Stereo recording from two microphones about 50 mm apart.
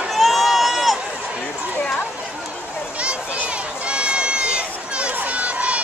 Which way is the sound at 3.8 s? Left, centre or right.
Right.